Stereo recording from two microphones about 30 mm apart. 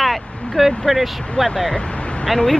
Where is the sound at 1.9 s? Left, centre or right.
Left.